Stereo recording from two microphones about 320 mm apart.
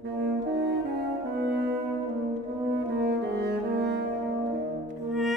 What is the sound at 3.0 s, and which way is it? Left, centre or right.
Music, right.